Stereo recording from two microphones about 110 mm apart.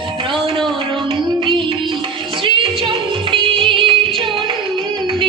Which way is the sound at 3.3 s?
50° right (ahead or behind).